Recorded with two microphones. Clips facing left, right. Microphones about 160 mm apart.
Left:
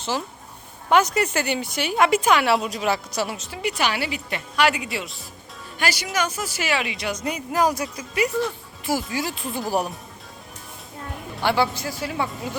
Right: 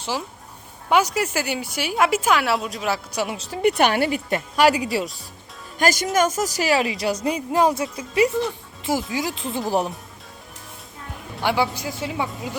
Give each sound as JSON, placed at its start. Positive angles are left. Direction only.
{"t": 0.0, "sound": "speech", "side_deg": -10}
{"t": 3.1, "sound": "a man's voice", "side_deg": -15}
{"t": 3.3, "sound": "a woman's voice", "side_deg": -35}
{"t": 3.6, "sound": "a woman's voice", "side_deg": -55}
{"t": 11.4, "sound": "a man's voice", "side_deg": -15}